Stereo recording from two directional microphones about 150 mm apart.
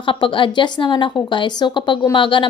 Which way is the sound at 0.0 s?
35° left (ahead or behind).